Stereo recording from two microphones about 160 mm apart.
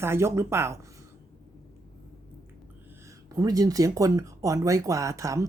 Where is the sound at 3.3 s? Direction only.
20° right (ahead or behind).